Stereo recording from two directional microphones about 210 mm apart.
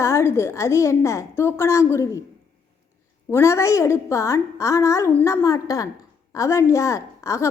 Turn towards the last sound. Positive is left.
turn(degrees=15)  # may be behind; listen again after turning